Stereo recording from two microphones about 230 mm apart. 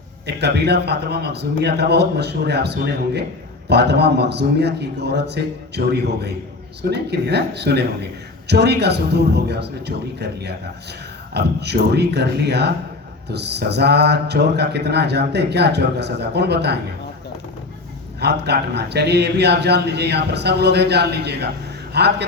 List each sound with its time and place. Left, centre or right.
0.3 s speech: right
18.2 s speech: right